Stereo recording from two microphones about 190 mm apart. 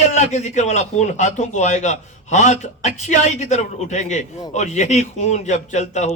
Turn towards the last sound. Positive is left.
turn(degrees=35)  # may be behind; listen again after turning